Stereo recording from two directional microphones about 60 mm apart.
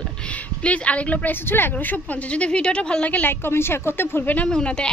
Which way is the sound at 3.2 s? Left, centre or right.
Left.